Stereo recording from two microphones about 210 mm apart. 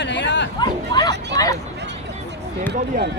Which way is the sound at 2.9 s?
35° right (ahead or behind).